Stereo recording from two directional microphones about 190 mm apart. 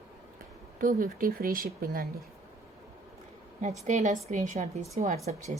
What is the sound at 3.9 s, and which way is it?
A woman's voice, 40° right (ahead or behind).